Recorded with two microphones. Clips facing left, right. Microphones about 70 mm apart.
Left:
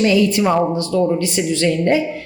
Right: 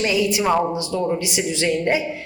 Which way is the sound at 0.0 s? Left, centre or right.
Centre.